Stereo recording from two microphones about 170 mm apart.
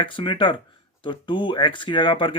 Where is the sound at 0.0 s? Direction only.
30° left (ahead or behind).